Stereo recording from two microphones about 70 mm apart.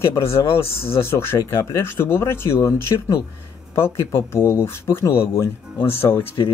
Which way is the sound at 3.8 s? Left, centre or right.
Left.